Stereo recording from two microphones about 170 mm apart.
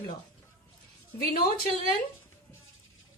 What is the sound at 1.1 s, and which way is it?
Speech, 60° left (ahead or behind).